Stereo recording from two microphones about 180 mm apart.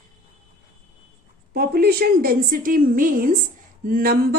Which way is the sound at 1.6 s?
60° right (ahead or behind).